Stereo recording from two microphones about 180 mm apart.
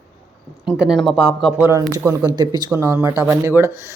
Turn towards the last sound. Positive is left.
turn(degrees=-15)  # may be behind; listen again after turning